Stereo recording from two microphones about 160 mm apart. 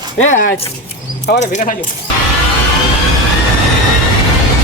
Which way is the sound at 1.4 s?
50° left (ahead or behind).